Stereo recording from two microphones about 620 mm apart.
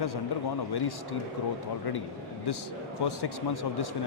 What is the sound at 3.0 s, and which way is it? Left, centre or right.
Speech, left.